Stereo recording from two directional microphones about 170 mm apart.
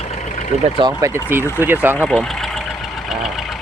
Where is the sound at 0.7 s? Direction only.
25° right (ahead or behind).